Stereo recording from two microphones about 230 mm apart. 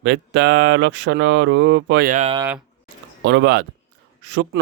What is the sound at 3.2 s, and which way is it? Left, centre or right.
Speech, right.